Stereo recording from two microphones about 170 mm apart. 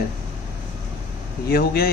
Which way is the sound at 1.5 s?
65° left (ahead or behind).